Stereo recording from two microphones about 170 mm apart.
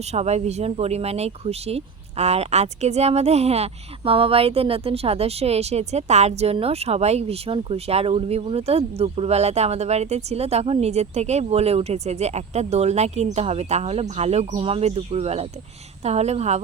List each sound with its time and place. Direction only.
0.0 s speech: 40° right (ahead or behind)